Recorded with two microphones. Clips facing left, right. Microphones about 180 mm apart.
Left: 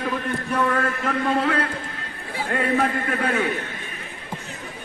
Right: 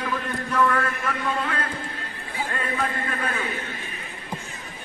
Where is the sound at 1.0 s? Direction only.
65° left (ahead or behind).